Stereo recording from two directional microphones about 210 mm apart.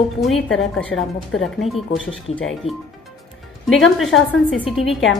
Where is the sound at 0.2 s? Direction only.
Centre (ahead or behind).